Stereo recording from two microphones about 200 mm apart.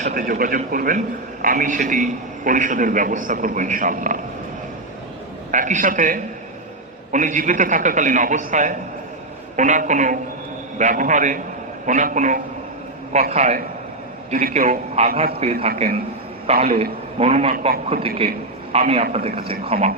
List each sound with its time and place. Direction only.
0.0 s a man's voice: 45° right (ahead or behind)
5.5 s a man's voice: 40° right (ahead or behind)